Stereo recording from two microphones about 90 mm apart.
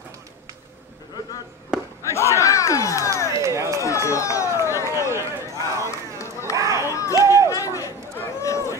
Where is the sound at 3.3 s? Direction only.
35° right (ahead or behind).